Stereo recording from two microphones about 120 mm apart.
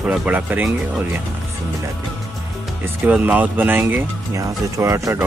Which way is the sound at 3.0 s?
15° right (ahead or behind).